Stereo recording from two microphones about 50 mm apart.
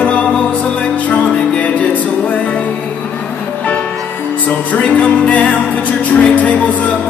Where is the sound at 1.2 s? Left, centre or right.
Centre.